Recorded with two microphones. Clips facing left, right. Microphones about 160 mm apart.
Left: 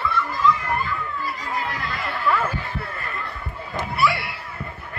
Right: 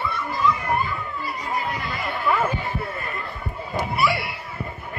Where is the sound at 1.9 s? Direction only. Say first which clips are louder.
Left 1 dB; 20° right (ahead or behind).